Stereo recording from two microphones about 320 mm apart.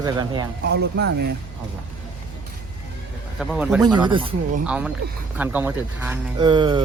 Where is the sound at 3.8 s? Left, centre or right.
Centre.